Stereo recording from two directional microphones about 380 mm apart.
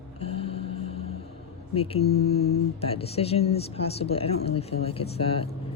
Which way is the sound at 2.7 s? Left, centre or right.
Centre.